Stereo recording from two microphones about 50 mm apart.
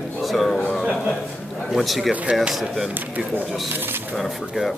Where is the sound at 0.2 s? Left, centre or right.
Centre.